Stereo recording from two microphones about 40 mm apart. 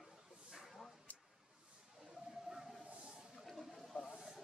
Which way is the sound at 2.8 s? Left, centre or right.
Right.